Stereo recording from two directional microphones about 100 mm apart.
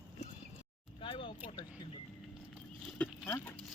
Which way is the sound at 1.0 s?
60° left (ahead or behind).